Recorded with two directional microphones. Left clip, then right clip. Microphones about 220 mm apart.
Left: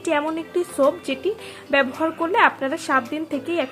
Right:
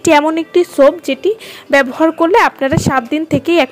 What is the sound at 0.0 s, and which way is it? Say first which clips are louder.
A woman's voice: right 12 dB; 35° right (ahead or behind).